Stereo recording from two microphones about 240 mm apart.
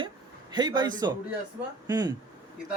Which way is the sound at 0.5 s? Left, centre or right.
Centre.